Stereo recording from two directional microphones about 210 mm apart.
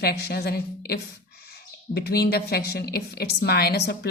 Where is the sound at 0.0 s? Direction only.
50° left (ahead or behind).